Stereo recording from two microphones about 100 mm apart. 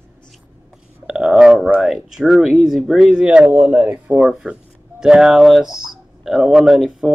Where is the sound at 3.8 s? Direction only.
15° right (ahead or behind).